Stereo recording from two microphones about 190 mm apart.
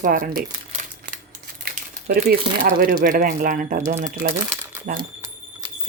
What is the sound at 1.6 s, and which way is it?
Crumpling, 55° right (ahead or behind).